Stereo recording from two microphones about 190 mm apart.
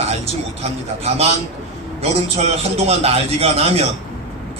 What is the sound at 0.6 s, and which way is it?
Speech, 35° right (ahead or behind).